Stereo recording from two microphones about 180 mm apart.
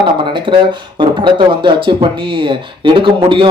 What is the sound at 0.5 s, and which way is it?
Speech, 25° right (ahead or behind).